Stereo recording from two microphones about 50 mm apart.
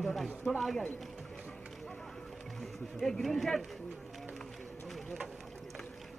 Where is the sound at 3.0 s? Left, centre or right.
Centre.